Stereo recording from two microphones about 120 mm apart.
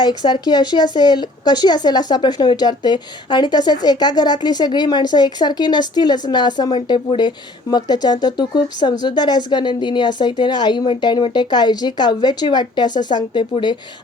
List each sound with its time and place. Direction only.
0.0 s speech: 35° left (ahead or behind)